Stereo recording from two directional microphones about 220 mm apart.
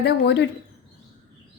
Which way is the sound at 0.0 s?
50° left (ahead or behind).